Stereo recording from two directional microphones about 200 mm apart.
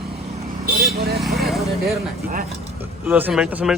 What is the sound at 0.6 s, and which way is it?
Speech, 50° right (ahead or behind).